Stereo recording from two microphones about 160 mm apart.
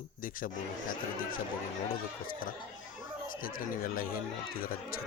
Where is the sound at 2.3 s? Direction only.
60° left (ahead or behind).